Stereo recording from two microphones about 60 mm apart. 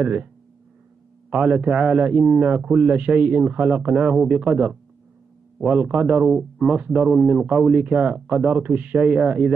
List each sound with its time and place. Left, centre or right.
0.0 s speech: right
1.3 s speech: centre